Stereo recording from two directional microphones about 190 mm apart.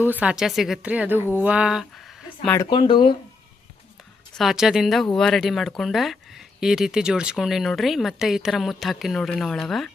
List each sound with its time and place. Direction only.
0.0 s a woman's voice: 10° right (ahead or behind)
2.6 s speech: 25° left (ahead or behind)
4.4 s speech: centre (ahead or behind)